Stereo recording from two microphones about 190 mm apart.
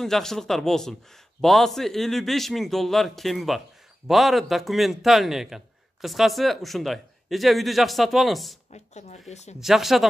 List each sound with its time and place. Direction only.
0.0 s a man's voice: centre (ahead or behind)
8.7 s speech: 35° left (ahead or behind)
9.6 s a man's voice: centre (ahead or behind)